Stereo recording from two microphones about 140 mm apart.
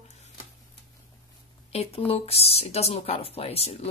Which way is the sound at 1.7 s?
45° left (ahead or behind).